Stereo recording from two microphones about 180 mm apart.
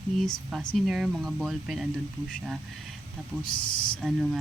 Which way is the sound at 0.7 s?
Centre (ahead or behind).